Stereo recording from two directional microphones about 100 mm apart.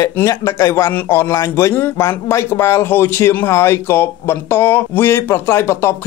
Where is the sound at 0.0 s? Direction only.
35° left (ahead or behind).